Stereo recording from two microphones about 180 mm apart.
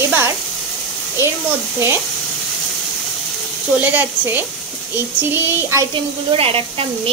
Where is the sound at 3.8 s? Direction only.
10° right (ahead or behind).